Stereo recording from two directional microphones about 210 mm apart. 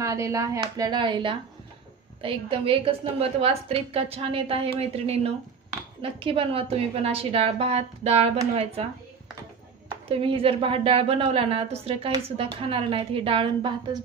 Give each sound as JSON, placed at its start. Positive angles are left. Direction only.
{"t": 0.0, "sound": "speech", "side_deg": -15}
{"t": 9.8, "sound": "speech", "side_deg": -25}